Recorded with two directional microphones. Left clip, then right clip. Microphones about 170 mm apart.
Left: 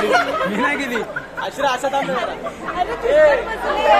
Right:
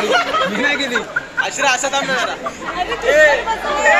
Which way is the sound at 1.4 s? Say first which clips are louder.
Right 4 dB; 30° left (ahead or behind).